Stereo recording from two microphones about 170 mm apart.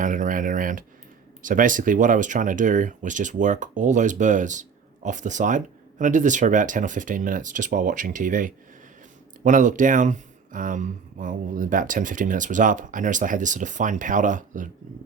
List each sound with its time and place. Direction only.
0.0 s speech: 50° right (ahead or behind)